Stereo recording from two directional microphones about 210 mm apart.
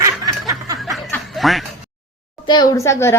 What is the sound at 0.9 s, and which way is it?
Snicker, centre (ahead or behind).